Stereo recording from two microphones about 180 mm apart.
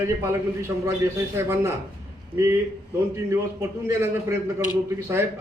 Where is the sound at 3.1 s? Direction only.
15° right (ahead or behind).